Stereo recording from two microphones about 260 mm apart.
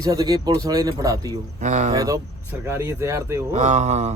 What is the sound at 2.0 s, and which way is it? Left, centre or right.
Speech, centre.